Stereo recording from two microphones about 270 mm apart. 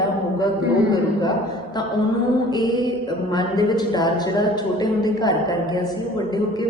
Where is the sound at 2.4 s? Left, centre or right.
Centre.